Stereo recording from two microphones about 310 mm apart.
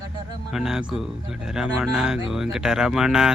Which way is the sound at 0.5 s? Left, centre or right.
Centre.